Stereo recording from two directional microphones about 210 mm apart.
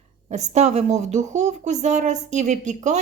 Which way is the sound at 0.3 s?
35° right (ahead or behind).